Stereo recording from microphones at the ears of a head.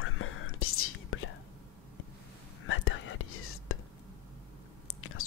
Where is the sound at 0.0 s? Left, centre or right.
Left.